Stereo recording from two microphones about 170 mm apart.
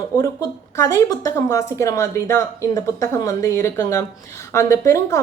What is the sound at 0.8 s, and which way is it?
A woman's voice, 15° left (ahead or behind).